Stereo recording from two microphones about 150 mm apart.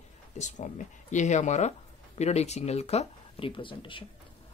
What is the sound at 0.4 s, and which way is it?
Speech, 50° left (ahead or behind).